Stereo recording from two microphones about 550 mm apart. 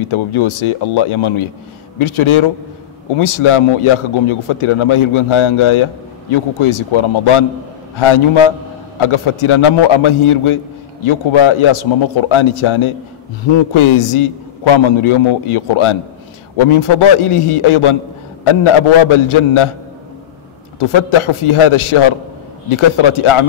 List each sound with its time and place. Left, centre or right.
0.0 s a man's voice: left
9.0 s a man's voice: left
20.8 s a man's voice: left